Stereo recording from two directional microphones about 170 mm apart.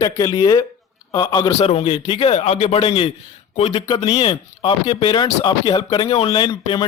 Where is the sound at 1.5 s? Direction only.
35° left (ahead or behind).